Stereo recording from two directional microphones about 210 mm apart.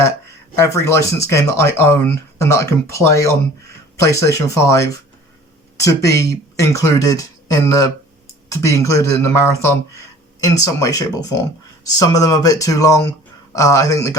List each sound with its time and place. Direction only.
0.5 s speech: 15° left (ahead or behind)